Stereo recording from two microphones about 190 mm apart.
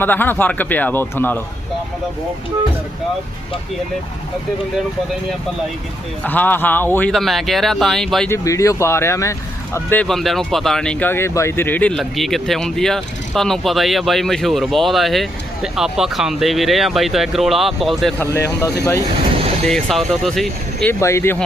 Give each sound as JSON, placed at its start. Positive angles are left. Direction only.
{"t": 0.0, "sound": "speech", "side_deg": 10}
{"t": 6.2, "sound": "speech", "side_deg": 10}
{"t": 8.3, "sound": "speech", "side_deg": 15}
{"t": 18.2, "sound": "speech", "side_deg": 15}
{"t": 19.6, "sound": "speech", "side_deg": 0}
{"t": 20.8, "sound": "speech", "side_deg": 15}